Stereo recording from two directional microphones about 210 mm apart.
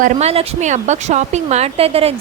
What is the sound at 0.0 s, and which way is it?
Speech, 30° right (ahead or behind).